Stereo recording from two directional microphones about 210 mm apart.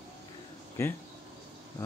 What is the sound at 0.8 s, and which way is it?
Speech, 15° left (ahead or behind).